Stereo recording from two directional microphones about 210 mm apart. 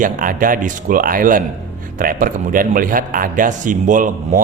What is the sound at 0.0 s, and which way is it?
A man's voice, 40° right (ahead or behind).